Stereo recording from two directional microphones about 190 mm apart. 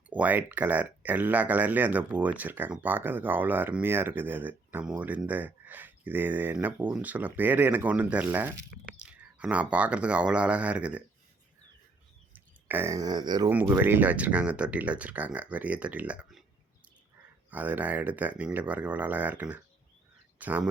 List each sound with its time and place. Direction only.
0.1 s speech: 10° right (ahead or behind)
12.3 s speech: 10° right (ahead or behind)
13.5 s speech: 10° right (ahead or behind)
17.5 s speech: 10° right (ahead or behind)